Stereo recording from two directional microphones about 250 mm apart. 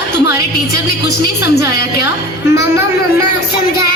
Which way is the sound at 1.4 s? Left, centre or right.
Left.